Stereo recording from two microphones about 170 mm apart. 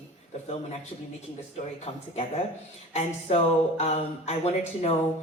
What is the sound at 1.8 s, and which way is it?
Speech, 35° left (ahead or behind).